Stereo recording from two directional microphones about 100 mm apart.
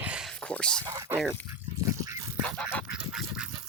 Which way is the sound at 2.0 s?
35° right (ahead or behind).